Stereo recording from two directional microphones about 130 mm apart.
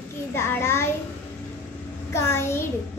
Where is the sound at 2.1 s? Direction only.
20° left (ahead or behind).